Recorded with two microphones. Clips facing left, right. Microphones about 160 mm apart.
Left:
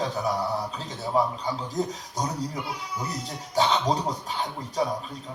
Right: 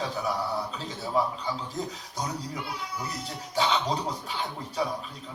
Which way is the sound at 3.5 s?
35° left (ahead or behind).